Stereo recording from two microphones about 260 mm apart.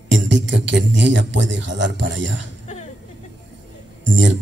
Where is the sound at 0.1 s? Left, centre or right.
Right.